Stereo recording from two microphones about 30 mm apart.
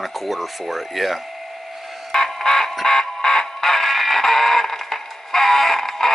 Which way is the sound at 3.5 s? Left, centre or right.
Centre.